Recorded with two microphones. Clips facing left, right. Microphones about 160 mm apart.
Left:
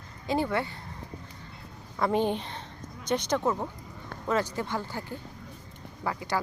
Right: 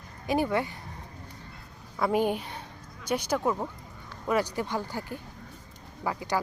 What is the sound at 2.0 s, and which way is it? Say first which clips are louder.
Speech: even; 5° right (ahead or behind).